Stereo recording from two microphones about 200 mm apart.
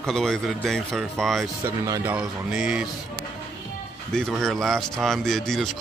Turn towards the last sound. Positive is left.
turn(degrees=0)  # may be behind; listen again after turning